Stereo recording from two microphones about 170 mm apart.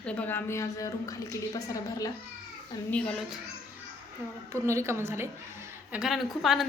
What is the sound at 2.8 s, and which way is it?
Speech, 5° left (ahead or behind).